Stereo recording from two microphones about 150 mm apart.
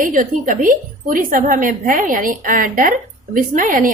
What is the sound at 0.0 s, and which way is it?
A woman's voice, 65° right (ahead or behind).